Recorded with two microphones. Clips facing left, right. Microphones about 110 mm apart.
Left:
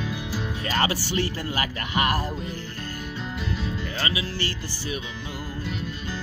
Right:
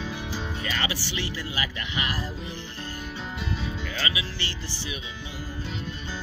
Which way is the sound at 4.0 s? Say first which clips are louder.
Left 4 dB; 35° left (ahead or behind).